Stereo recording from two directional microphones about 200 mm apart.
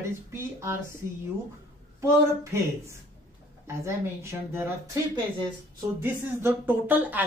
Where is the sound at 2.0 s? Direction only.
15° right (ahead or behind).